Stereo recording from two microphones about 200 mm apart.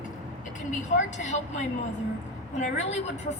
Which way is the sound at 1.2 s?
35° left (ahead or behind).